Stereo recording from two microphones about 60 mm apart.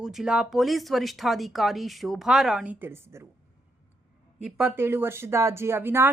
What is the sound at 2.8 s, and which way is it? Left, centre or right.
Speech, right.